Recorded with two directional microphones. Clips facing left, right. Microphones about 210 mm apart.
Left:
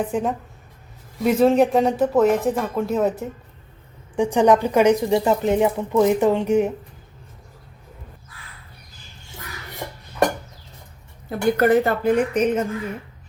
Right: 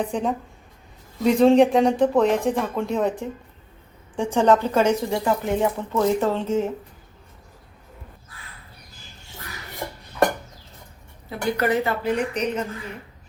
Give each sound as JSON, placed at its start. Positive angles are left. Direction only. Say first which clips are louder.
{"t": 0.0, "sound": "speech", "louder": "left 1 dB", "side_deg": 5}
{"t": 11.3, "sound": "speech", "louder": "left 6 dB", "side_deg": 50}